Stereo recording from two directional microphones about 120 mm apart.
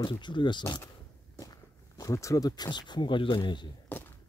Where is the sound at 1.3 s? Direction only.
30° left (ahead or behind).